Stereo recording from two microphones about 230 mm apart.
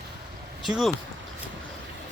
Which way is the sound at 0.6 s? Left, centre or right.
Centre.